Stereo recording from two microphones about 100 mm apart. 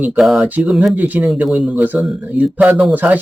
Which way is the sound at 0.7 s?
Centre (ahead or behind).